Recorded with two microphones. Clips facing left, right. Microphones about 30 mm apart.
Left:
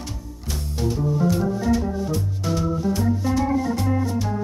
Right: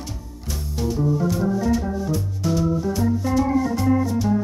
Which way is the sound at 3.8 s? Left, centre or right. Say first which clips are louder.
Right 4 dB; centre.